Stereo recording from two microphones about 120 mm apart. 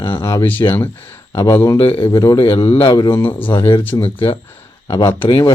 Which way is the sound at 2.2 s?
30° left (ahead or behind).